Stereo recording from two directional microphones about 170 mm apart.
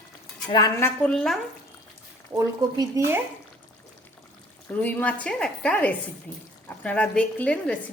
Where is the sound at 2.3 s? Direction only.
20° right (ahead or behind).